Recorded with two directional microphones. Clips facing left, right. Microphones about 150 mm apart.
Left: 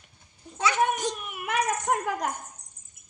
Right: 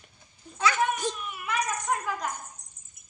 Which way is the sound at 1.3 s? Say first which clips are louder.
Left 3 dB; 65° left (ahead or behind).